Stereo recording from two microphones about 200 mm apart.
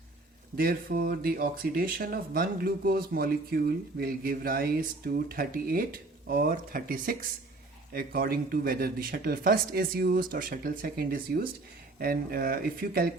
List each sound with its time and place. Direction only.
0.5 s speech: 50° right (ahead or behind)